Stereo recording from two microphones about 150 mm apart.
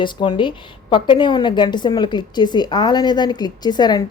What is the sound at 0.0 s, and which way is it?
A woman's voice, 30° left (ahead or behind).